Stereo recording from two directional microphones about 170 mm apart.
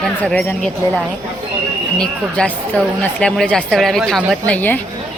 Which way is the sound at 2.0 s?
5° left (ahead or behind).